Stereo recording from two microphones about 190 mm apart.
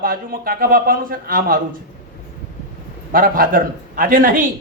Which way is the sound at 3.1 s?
50° right (ahead or behind).